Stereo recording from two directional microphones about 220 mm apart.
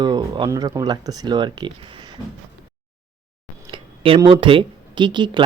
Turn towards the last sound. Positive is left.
turn(degrees=-20)  # may be behind; listen again after turning